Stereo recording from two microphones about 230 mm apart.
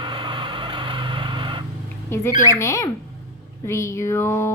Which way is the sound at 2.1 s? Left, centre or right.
Centre.